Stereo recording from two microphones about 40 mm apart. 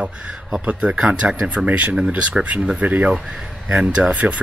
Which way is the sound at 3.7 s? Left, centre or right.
Right.